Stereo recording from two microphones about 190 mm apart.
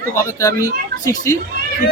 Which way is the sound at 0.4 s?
20° left (ahead or behind).